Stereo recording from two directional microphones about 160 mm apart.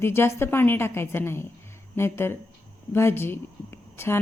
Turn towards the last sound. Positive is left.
turn(degrees=15)  # may be behind; listen again after turning